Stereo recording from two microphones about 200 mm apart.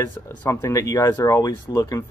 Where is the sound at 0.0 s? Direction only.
15° left (ahead or behind).